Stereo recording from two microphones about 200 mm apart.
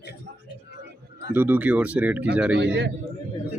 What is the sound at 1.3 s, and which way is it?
Speech, 10° right (ahead or behind).